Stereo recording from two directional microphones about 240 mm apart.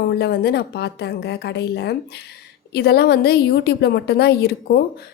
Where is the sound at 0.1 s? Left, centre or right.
Left.